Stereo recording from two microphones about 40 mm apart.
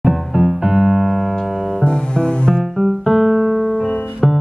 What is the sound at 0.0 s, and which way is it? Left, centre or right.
Music, centre.